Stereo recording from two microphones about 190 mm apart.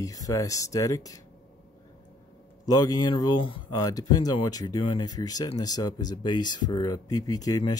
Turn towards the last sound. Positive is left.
turn(degrees=20)  # may be behind; listen again after turning